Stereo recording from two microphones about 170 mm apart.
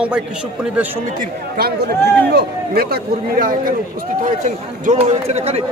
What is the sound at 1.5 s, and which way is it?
Speech, 65° right (ahead or behind).